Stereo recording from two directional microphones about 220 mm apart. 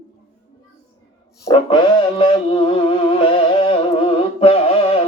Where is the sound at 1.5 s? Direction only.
25° left (ahead or behind).